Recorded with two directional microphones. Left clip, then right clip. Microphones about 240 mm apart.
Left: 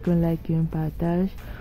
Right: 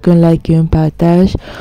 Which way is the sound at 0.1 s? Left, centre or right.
Right.